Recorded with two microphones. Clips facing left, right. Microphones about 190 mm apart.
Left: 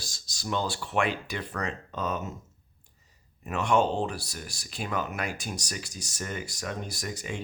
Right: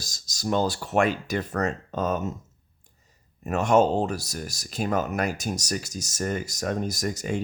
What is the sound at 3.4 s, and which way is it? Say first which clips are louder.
Speech: right 5 dB; 45° right (ahead or behind).